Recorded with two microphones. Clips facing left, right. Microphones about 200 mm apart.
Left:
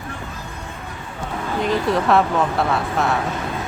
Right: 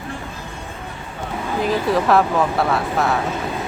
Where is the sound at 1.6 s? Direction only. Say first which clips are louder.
Right 1 dB; centre (ahead or behind).